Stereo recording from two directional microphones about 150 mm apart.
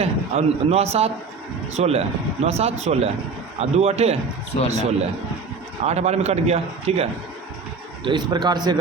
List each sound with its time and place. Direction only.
0.0 s a man's voice: 45° right (ahead or behind)
8.0 s a man's voice: 30° right (ahead or behind)